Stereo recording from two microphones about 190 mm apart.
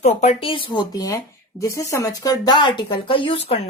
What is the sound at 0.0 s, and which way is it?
Speech, 35° left (ahead or behind).